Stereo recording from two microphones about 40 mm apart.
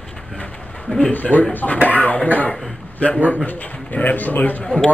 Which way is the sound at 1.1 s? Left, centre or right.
Left.